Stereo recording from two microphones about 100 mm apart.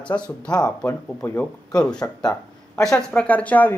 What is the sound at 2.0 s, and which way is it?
Speech, 30° left (ahead or behind).